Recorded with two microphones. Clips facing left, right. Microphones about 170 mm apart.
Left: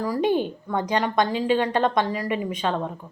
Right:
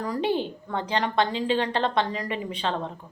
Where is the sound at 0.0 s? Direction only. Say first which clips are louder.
Left 4 dB; 10° left (ahead or behind).